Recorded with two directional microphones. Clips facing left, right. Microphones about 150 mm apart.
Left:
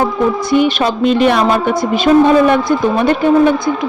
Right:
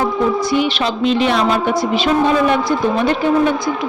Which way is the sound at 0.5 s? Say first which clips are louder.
Left 5 dB; 50° left (ahead or behind).